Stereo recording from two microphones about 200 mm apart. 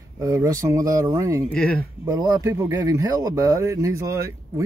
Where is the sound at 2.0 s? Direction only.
20° right (ahead or behind).